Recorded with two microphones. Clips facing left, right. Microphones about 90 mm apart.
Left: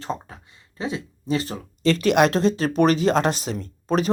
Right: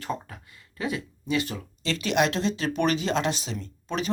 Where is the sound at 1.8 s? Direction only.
50° left (ahead or behind).